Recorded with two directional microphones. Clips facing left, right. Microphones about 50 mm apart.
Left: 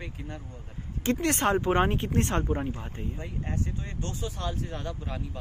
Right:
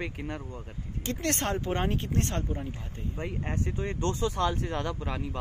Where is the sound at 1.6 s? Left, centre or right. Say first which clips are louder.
Left 5 dB; left.